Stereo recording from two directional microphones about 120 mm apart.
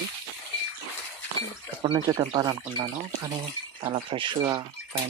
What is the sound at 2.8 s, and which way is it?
Speech, 30° right (ahead or behind).